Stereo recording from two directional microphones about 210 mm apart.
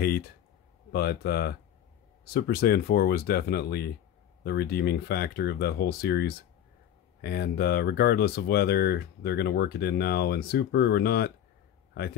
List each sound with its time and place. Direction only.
0.0 s speech: 45° left (ahead or behind)